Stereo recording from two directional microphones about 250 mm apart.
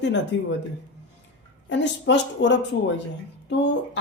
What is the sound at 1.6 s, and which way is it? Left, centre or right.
Speech, left.